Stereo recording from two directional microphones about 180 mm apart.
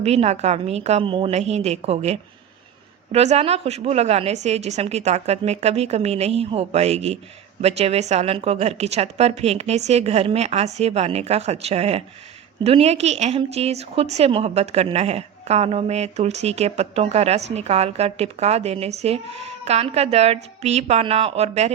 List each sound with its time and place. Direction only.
0.0 s a woman's voice: 35° right (ahead or behind)